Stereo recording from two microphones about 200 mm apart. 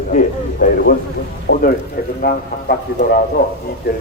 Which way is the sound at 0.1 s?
40° left (ahead or behind).